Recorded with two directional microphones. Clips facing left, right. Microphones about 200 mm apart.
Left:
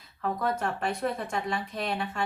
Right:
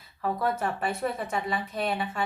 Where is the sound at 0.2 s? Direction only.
5° right (ahead or behind).